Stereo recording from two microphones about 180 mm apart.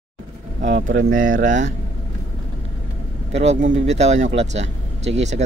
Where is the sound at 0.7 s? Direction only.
50° right (ahead or behind).